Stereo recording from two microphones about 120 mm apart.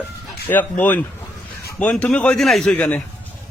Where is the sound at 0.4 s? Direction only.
15° left (ahead or behind).